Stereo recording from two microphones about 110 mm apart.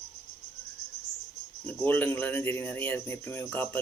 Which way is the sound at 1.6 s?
15° left (ahead or behind).